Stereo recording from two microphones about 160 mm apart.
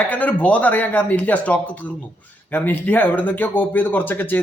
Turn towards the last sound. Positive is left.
turn(degrees=15)  # may be behind; listen again after turning